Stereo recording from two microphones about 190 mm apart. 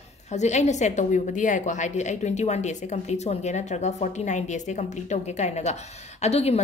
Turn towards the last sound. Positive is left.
turn(degrees=35)  # may be behind; listen again after turning